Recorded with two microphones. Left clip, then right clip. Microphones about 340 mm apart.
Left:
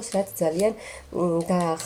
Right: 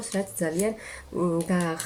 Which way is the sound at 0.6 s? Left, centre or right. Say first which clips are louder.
Left 5 dB; centre.